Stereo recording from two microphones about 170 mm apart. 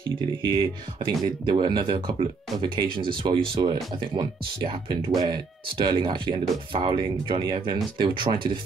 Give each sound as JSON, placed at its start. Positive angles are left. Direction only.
{"t": 0.4, "sound": "speech", "side_deg": -30}